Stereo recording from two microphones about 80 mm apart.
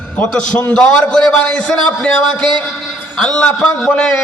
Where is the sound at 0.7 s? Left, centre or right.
Centre.